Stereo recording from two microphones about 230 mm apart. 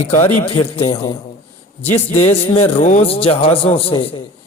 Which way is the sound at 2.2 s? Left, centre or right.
Left.